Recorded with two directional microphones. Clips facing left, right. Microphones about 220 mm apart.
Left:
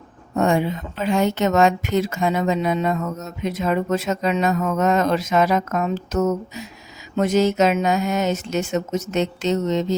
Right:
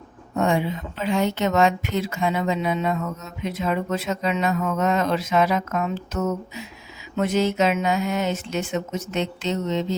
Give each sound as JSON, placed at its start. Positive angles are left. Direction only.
{"t": 0.3, "sound": "a woman's voice", "side_deg": 45}